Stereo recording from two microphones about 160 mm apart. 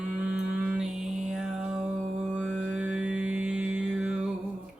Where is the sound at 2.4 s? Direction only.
5° right (ahead or behind).